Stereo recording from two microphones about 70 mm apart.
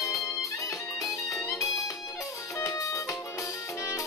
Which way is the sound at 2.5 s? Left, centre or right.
Left.